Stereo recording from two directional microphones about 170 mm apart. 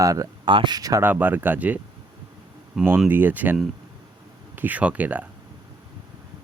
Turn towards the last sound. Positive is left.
turn(degrees=-10)  # may be behind; listen again after turning